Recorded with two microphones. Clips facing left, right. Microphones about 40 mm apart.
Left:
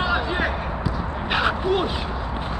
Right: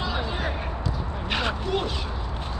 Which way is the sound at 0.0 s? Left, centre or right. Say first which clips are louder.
Left 6 dB; left.